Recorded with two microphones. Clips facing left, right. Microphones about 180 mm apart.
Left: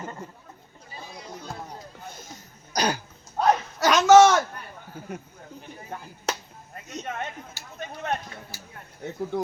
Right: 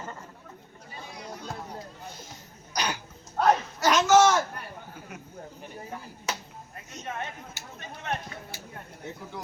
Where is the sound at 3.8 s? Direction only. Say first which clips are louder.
Left 6 dB; 70° left (ahead or behind).